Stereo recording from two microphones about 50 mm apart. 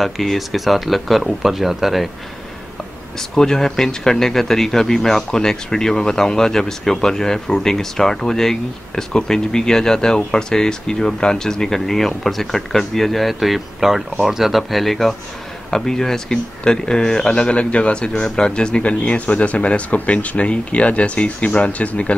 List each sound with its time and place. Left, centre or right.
0.0 s speech: centre
3.2 s a man's voice: centre; by 22.1 s left